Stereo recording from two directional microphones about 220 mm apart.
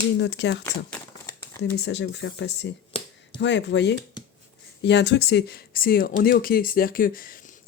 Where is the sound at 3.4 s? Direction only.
55° left (ahead or behind).